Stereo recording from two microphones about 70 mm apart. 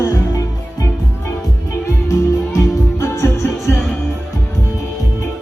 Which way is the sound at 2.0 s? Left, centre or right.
Left.